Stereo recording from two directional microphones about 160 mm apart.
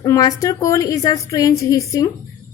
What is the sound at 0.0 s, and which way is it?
A woman's voice, 20° left (ahead or behind).